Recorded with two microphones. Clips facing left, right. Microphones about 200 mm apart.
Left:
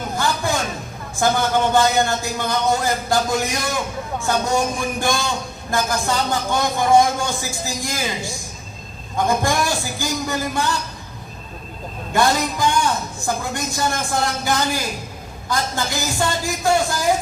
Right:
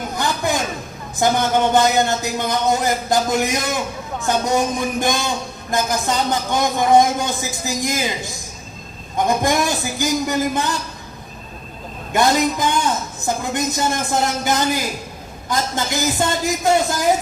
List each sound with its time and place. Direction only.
0.2 s a sound: 20° right (ahead or behind)
1.1 s a man's voice: 20° right (ahead or behind)
12.1 s a man's voice: 20° right (ahead or behind)